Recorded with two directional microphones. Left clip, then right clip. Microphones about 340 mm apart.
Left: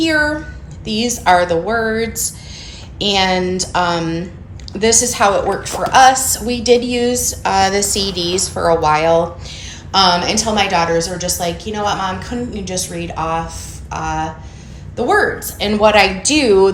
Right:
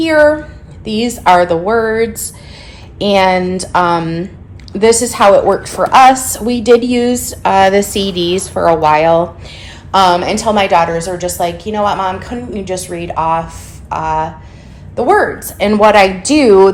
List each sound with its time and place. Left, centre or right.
0.0 s a woman's voice: right